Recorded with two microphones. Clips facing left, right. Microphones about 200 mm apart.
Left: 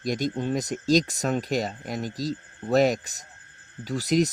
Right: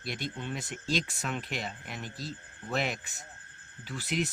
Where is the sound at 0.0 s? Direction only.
40° left (ahead or behind).